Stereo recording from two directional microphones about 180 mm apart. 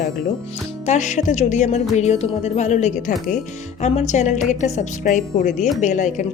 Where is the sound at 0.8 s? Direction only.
40° left (ahead or behind).